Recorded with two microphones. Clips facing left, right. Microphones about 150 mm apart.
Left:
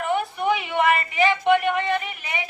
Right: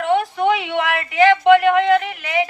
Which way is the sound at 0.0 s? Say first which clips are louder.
Right 6 dB; 90° right.